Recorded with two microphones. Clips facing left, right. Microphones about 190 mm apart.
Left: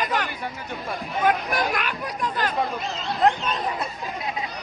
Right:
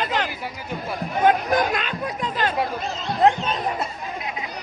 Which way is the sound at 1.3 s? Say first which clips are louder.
Right 4 dB; 25° right (ahead or behind).